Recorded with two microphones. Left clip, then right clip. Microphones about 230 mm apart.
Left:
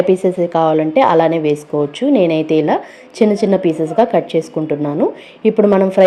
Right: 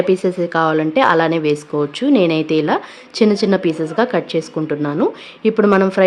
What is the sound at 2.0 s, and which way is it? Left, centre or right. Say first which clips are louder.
Speech: left 1 dB; centre.